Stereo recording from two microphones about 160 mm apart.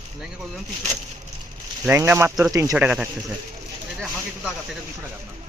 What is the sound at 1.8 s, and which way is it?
Speech, 10° right (ahead or behind).